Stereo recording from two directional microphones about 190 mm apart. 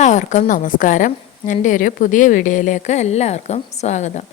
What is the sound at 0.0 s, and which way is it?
A woman's voice, 40° left (ahead or behind).